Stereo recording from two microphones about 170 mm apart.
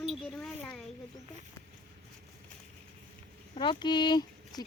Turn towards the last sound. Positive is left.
turn(degrees=25)  # may be behind; listen again after turning